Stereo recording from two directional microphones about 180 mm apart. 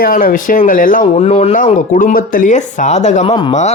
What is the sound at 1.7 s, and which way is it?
Speech, 45° left (ahead or behind).